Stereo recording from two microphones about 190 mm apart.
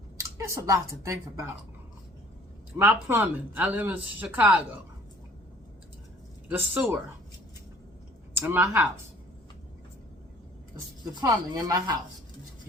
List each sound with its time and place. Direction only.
0.3 s speech: 15° right (ahead or behind)
2.7 s speech: 10° right (ahead or behind)
6.5 s speech: 10° right (ahead or behind)
8.4 s speech: 10° right (ahead or behind)
11.0 s speech: 20° right (ahead or behind)